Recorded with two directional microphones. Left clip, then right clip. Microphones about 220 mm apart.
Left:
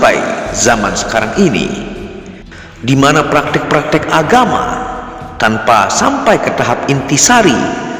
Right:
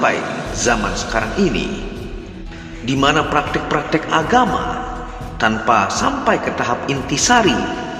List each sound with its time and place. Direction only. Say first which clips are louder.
0.0 s a man's voice: left 8 dB; 40° left (ahead or behind)
2.8 s a man's voice: left 6 dB; 40° left (ahead or behind)